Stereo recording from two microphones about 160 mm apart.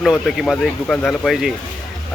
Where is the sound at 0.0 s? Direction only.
Centre (ahead or behind).